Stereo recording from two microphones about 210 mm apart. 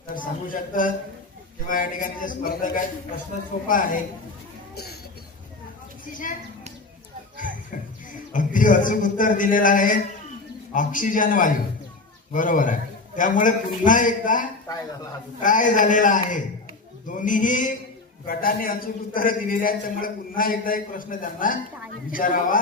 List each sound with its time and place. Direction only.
0.1 s a man's voice: 45° left (ahead or behind)
4.7 s a sound: 50° left (ahead or behind)
8.1 s a man's voice: 40° left (ahead or behind)